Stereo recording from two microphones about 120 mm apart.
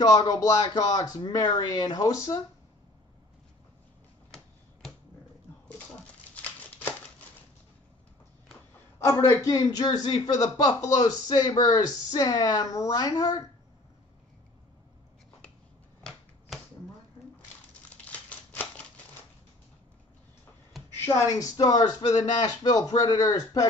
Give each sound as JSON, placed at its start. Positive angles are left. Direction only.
{"t": 0.0, "sound": "a man's voice", "side_deg": 30}
{"t": 6.3, "sound": "a sound", "side_deg": 10}
{"t": 9.0, "sound": "a man's voice", "side_deg": 30}
{"t": 18.0, "sound": "typewriter", "side_deg": 10}
{"t": 21.1, "sound": "a man's voice", "side_deg": 30}